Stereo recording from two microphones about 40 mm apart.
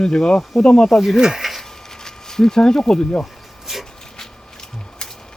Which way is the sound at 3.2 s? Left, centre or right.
Centre.